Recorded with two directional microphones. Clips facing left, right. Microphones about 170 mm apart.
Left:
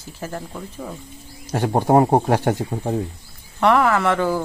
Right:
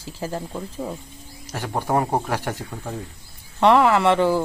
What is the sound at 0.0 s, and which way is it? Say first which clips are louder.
Speech: right 2 dB; 30° right (ahead or behind).